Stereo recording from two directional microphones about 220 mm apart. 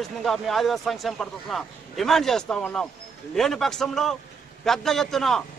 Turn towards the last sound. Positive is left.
turn(degrees=0)  # may be behind; listen again after turning